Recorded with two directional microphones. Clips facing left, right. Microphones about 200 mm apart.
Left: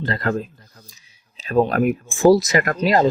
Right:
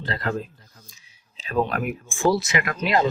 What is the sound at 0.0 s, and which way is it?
Speech, 45° left (ahead or behind).